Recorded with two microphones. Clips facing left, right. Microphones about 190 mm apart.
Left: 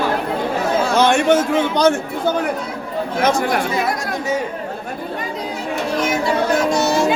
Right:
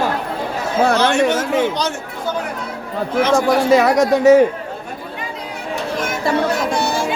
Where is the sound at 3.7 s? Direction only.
80° right.